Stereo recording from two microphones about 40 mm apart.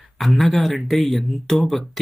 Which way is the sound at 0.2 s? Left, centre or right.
Centre.